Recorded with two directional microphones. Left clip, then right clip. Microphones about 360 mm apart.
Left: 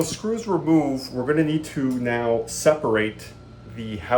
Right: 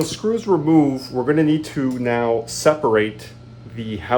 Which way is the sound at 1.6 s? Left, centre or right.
Centre.